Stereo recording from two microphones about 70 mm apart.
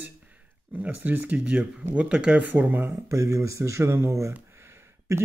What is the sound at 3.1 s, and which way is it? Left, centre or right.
Speech, right.